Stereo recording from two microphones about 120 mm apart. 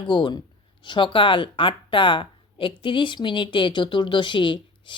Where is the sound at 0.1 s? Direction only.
40° left (ahead or behind).